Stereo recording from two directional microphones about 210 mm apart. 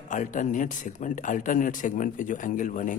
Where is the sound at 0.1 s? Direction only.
35° left (ahead or behind).